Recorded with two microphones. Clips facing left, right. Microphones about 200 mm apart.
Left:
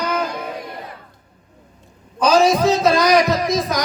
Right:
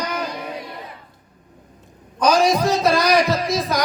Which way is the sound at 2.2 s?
25° left (ahead or behind).